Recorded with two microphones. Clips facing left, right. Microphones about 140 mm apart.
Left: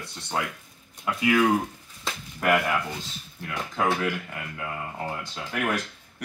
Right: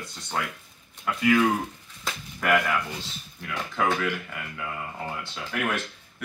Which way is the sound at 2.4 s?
5° left (ahead or behind).